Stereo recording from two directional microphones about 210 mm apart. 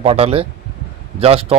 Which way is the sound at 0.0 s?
30° right (ahead or behind).